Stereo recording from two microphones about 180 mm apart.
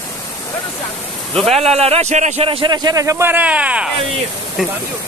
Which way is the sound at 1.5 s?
35° right (ahead or behind).